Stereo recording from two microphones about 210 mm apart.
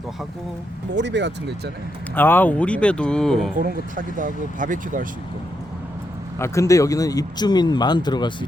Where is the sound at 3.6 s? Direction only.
40° right (ahead or behind).